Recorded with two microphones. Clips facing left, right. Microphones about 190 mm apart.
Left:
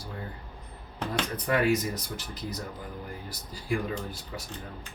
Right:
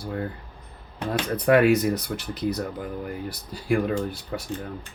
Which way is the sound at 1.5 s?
65° right (ahead or behind).